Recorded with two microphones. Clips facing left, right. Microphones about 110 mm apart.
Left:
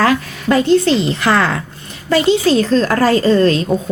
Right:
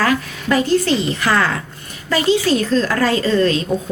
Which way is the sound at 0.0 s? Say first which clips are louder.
Left 3 dB; 30° left (ahead or behind).